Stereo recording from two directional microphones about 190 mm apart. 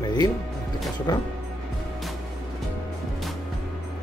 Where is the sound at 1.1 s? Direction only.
20° left (ahead or behind).